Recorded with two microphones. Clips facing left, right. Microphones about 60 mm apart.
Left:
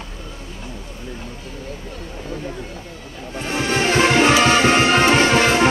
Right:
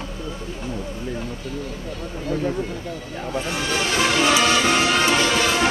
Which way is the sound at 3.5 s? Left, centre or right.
Left.